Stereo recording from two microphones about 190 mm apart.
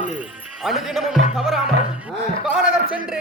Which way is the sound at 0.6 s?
Centre (ahead or behind).